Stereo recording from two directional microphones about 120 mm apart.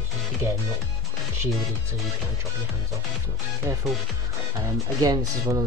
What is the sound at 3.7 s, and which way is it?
Speech, 20° right (ahead or behind).